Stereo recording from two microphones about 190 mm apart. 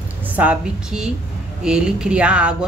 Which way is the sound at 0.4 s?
5° right (ahead or behind).